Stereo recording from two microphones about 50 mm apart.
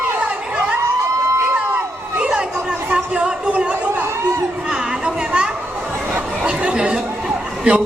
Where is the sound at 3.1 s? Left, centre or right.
Centre.